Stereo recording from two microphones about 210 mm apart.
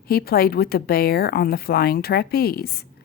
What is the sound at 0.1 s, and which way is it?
Speech, 45° left (ahead or behind).